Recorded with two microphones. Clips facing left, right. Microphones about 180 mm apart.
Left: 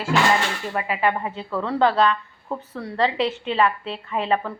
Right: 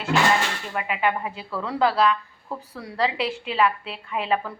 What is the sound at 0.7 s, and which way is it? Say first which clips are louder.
Speech: left 4 dB; 35° left (ahead or behind).